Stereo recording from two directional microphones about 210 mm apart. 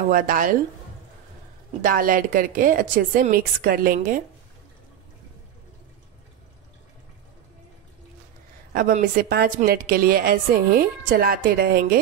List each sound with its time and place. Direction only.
0.1 s a woman's voice: 40° right (ahead or behind)
1.8 s a woman's voice: 40° right (ahead or behind)
8.7 s a woman's voice: 40° right (ahead or behind)